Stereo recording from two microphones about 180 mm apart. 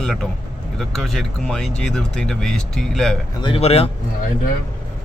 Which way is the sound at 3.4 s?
30° left (ahead or behind).